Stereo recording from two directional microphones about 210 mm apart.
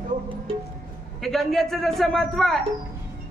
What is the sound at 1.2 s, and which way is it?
A woman's voice, centre (ahead or behind).